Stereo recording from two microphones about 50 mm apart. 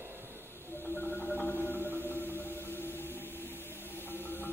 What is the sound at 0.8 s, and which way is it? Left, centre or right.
Marimba, left.